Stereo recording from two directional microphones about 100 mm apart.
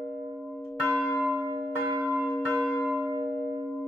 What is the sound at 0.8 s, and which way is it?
Church bell, 10° right (ahead or behind).